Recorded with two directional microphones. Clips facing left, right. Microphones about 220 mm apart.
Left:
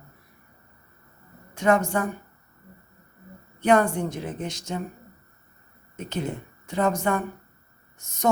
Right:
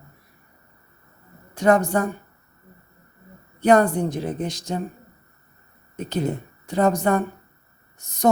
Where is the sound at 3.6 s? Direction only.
35° right (ahead or behind).